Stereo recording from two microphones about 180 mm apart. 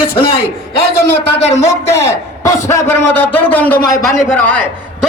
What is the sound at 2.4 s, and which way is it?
A man's voice, 15° left (ahead or behind).